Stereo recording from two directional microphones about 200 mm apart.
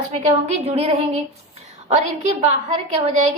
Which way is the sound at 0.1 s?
35° right (ahead or behind).